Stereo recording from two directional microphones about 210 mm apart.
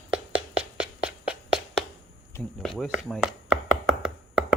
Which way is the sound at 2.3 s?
Centre (ahead or behind).